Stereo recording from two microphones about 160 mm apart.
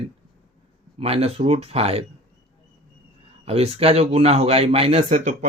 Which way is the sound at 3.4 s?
40° right (ahead or behind).